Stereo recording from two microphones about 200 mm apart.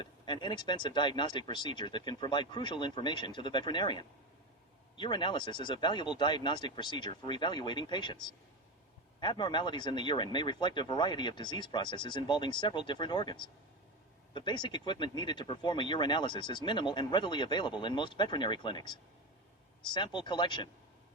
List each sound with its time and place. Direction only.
0.0 s speech: 25° left (ahead or behind)